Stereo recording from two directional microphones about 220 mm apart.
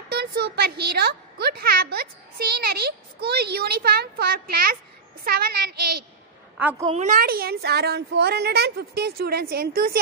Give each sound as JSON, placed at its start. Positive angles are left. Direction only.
{"t": 0.1, "sound": "a woman's voice", "side_deg": -45}
{"t": 6.6, "sound": "a woman's voice", "side_deg": -10}
{"t": 6.9, "sound": "a woman's voice", "side_deg": -35}